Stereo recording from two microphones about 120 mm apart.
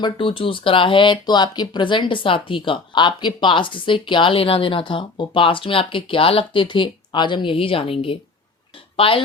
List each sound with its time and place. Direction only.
0.0 s speech: 45° left (ahead or behind)